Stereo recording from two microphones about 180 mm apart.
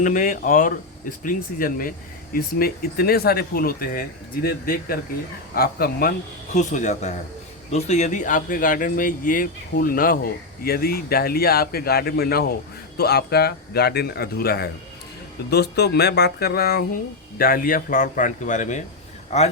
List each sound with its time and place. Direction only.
0.0 s a man's voice: 50° left (ahead or behind)